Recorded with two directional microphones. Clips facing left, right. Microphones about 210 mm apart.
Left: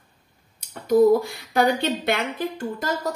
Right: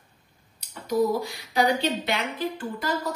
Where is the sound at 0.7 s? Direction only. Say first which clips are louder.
Left 8 dB; 55° left (ahead or behind).